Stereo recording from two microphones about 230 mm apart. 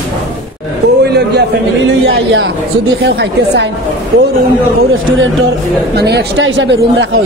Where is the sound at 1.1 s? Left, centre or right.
Right.